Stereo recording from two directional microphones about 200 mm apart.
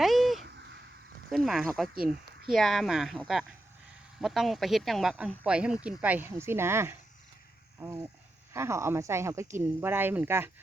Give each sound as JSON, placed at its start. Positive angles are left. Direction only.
{"t": 0.0, "sound": "a sound", "side_deg": 0}
{"t": 0.4, "sound": "crow", "side_deg": -60}
{"t": 1.3, "sound": "speech", "side_deg": 0}